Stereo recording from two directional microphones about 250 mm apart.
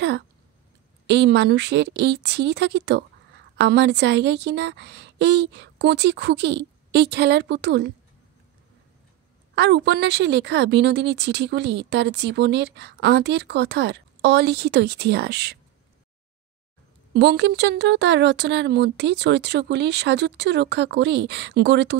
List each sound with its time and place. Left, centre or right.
1.0 s speech: right
9.6 s speech: right
17.1 s speech: right